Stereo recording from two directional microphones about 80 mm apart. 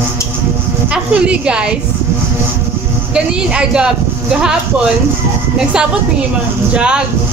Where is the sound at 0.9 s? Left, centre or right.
Centre.